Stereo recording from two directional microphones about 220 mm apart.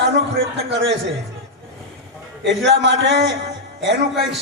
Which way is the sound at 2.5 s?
55° right (ahead or behind).